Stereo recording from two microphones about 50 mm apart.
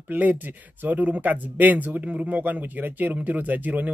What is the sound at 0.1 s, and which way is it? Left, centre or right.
Speech, right.